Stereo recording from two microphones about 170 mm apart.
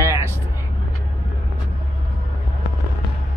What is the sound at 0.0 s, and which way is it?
Vehicle, 15° right (ahead or behind).